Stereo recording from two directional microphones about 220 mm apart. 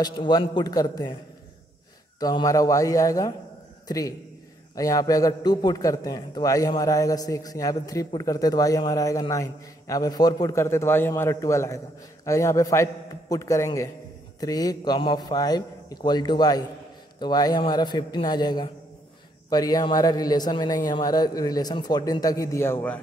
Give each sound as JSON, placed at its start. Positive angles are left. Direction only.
{"t": 0.0, "sound": "a man's voice", "side_deg": 20}
{"t": 2.1, "sound": "a man's voice", "side_deg": 15}